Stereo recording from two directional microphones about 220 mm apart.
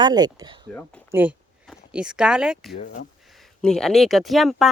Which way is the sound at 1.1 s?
5° right (ahead or behind).